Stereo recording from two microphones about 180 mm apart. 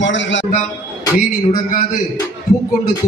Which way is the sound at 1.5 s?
50° left (ahead or behind).